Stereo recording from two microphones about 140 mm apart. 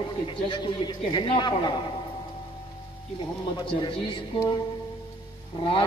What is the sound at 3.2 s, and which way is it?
A man's voice, 35° left (ahead or behind).